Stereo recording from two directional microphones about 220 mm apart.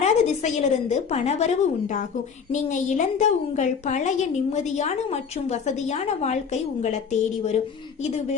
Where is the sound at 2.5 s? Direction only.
35° left (ahead or behind).